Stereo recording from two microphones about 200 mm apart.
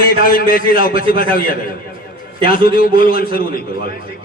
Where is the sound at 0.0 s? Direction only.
45° left (ahead or behind).